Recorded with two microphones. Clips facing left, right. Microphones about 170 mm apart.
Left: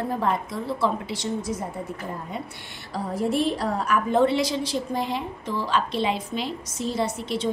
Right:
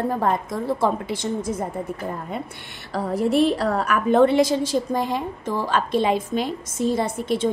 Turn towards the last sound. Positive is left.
turn(degrees=-50)  # may be behind; listen again after turning